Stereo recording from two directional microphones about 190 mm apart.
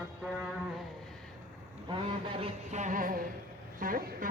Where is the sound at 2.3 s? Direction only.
35° right (ahead or behind).